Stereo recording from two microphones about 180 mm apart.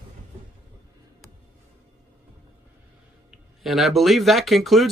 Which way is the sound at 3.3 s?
Centre (ahead or behind).